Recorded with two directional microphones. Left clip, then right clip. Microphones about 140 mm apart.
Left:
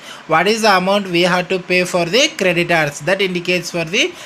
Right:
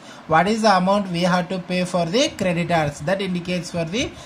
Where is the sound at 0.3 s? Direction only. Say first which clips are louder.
Left 4 dB; 25° left (ahead or behind).